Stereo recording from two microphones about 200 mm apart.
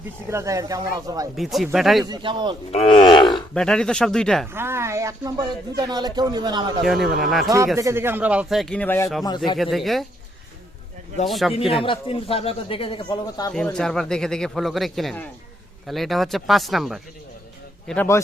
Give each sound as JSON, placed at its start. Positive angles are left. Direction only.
{"t": 0.3, "sound": "speech", "side_deg": -15}
{"t": 1.4, "sound": "speech", "side_deg": 0}
{"t": 2.0, "sound": "speech", "side_deg": -25}
{"t": 2.7, "sound": "speech", "side_deg": 25}
{"t": 3.5, "sound": "speech", "side_deg": 5}
{"t": 4.5, "sound": "speech", "side_deg": -10}
{"t": 6.8, "sound": "speech", "side_deg": 0}
{"t": 7.8, "sound": "speech", "side_deg": -15}
{"t": 11.3, "sound": "speech", "side_deg": 0}
{"t": 11.8, "sound": "speech", "side_deg": 25}
{"t": 13.5, "sound": "speech", "side_deg": 5}